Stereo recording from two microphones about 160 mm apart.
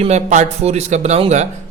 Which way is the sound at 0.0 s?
45° right (ahead or behind).